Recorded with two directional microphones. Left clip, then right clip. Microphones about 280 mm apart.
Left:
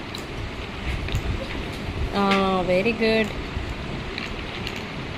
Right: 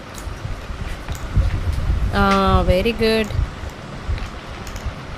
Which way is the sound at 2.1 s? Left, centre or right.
Right.